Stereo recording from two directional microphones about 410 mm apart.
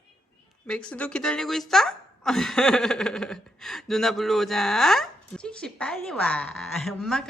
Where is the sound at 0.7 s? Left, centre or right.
Centre.